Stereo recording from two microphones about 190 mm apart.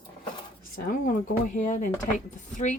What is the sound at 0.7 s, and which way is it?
Speech, 45° left (ahead or behind).